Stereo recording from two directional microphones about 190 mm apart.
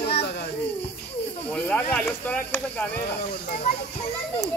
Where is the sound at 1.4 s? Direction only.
5° left (ahead or behind).